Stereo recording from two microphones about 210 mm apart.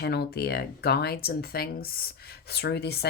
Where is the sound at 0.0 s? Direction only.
50° left (ahead or behind).